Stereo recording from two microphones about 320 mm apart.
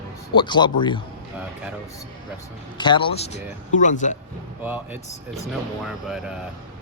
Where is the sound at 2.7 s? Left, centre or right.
Centre.